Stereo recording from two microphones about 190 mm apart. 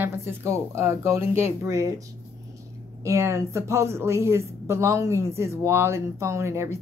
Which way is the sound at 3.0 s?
15° right (ahead or behind).